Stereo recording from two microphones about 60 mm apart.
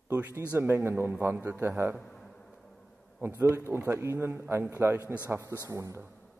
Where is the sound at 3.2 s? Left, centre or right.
Right.